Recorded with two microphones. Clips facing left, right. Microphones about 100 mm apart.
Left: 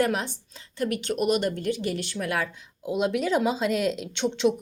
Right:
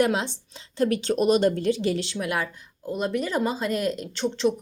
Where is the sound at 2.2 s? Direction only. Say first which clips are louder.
Right 1 dB; 5° right (ahead or behind).